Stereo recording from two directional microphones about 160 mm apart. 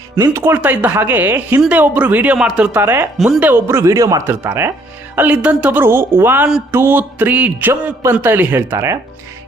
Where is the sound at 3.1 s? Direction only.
5° right (ahead or behind).